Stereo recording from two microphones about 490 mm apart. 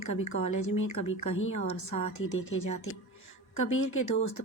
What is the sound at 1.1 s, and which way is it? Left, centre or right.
Speech, left.